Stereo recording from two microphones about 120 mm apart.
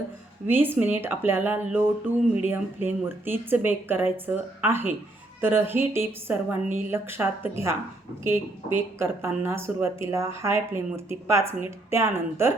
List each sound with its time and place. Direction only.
0.4 s a woman's voice: 15° right (ahead or behind)